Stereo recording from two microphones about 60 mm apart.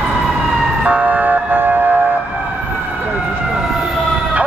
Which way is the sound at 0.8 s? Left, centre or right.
Right.